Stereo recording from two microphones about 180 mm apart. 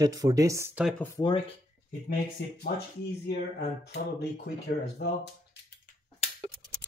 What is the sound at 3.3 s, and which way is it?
Speech, 65° left (ahead or behind).